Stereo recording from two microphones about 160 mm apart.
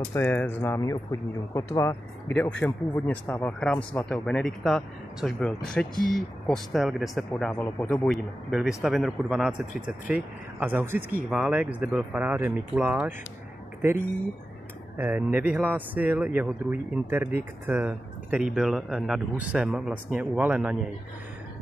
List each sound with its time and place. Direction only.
0.1 s speech: 15° left (ahead or behind); by 13.1 s 10° right (ahead or behind)
15.0 s speech: 10° right (ahead or behind)